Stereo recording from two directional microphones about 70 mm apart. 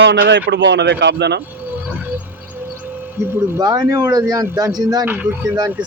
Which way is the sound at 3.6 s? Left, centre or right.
Right.